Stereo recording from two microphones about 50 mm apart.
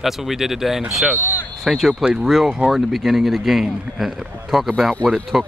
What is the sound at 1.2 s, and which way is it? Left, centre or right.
Speech, left.